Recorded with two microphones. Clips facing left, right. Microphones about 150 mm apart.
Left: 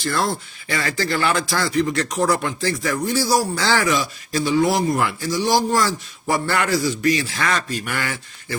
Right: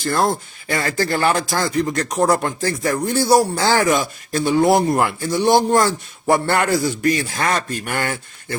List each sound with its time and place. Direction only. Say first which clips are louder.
0.0 s speech: right 4 dB; 50° right (ahead or behind)